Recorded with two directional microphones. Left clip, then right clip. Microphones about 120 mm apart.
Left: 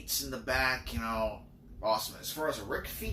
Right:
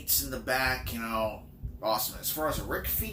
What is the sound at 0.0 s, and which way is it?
Speech, 20° right (ahead or behind).